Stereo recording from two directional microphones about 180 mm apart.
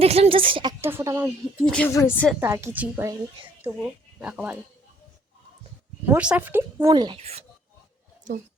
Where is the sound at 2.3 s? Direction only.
15° right (ahead or behind).